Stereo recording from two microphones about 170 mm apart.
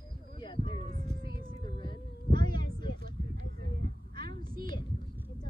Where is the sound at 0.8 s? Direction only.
55° right (ahead or behind).